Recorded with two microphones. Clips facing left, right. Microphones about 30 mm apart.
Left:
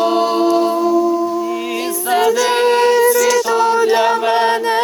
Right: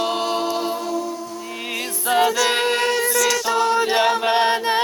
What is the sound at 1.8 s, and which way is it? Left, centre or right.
A capella, left.